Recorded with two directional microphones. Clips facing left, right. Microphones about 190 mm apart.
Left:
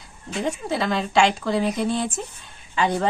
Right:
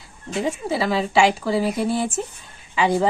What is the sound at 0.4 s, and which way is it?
Speech, 5° right (ahead or behind).